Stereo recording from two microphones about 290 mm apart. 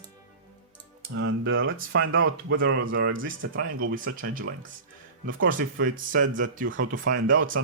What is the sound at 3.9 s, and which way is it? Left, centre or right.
Speech, right.